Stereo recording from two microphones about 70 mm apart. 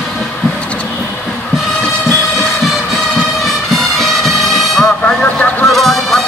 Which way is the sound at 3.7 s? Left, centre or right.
Centre.